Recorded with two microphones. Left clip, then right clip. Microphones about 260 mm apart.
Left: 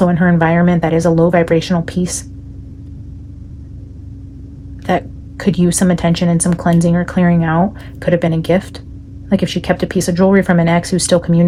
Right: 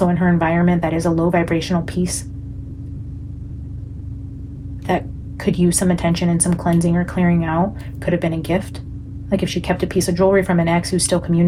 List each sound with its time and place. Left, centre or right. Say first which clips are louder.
0.0 s speech: left 4 dB; left
4.9 s speech: left 4 dB; left